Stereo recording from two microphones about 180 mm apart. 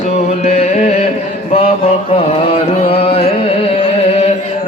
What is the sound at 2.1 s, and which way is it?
Carnatic music, 35° left (ahead or behind).